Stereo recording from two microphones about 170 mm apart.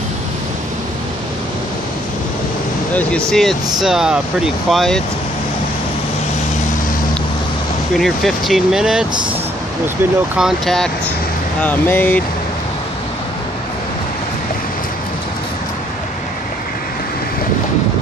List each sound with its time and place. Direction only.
2.9 s speech: 10° left (ahead or behind)
8.0 s speech: centre (ahead or behind)
10.3 s speech: centre (ahead or behind)